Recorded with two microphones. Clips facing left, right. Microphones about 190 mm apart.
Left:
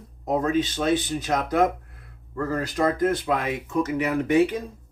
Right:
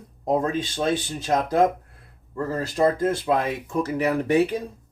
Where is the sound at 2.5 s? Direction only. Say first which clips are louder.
Right 2 dB; 30° right (ahead or behind).